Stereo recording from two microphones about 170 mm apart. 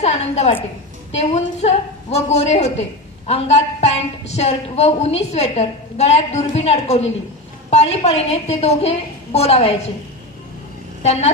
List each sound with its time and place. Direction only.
0.0 s a woman's voice: 40° left (ahead or behind)
11.0 s a woman's voice: 40° left (ahead or behind)